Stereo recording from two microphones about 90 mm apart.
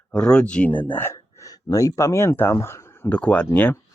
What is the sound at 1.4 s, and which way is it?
Speech, 40° left (ahead or behind).